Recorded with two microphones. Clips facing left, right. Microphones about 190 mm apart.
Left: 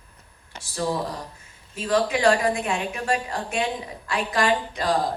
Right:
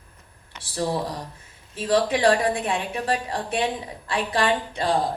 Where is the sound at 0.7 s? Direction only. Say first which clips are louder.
Right 1 dB; 35° right (ahead or behind).